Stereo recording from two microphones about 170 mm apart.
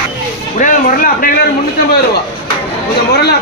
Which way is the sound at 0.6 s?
50° left (ahead or behind).